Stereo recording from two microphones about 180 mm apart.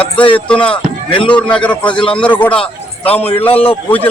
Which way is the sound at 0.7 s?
25° left (ahead or behind).